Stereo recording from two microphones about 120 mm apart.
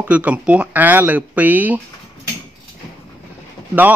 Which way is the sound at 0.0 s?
10° right (ahead or behind).